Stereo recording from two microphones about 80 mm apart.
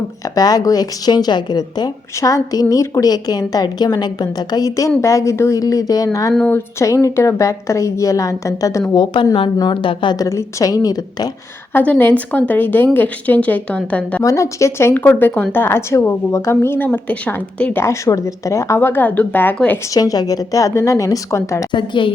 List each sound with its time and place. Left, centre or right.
0.3 s speech: left
2.3 s a woman's voice: left
4.9 s a woman's voice: left
9.0 s a woman's voice: left
9.6 s a woman's voice: left
10.2 s a woman's voice: left
11.7 s a woman's voice: left
14.3 s a woman's voice: left
14.9 s a woman's voice: left
17.8 s a woman's voice: left
18.8 s a woman's voice: left
19.9 s a woman's voice: left
21.7 s a woman's voice: left